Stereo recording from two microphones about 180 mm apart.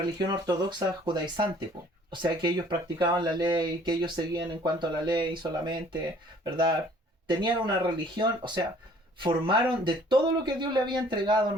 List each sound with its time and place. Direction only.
0.0 s speech: 25° right (ahead or behind)